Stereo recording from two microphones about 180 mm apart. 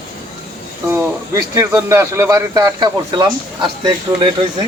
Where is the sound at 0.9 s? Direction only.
15° right (ahead or behind).